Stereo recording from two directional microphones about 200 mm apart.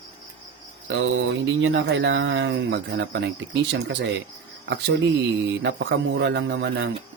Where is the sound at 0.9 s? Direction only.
65° right (ahead or behind).